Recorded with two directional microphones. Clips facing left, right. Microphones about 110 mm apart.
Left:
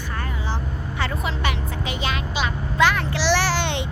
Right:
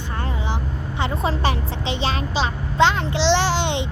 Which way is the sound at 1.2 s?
30° right (ahead or behind).